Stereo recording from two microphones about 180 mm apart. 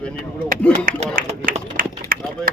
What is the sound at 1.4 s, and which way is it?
Speech, 50° right (ahead or behind).